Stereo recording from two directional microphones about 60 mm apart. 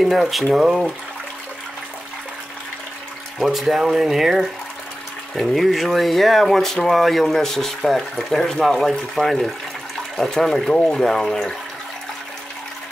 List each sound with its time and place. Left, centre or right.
0.0 s speech: centre
3.4 s speech: centre